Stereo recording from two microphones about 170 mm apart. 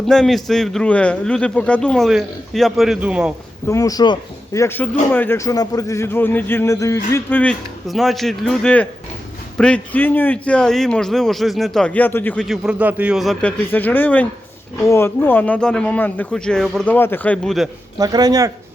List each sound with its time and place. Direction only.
0.0 s a man's voice: centre (ahead or behind)
3.7 s speech: 20° left (ahead or behind)
7.9 s a man's voice: centre (ahead or behind)
13.7 s speech: 10° left (ahead or behind)
17.9 s speech: 20° right (ahead or behind)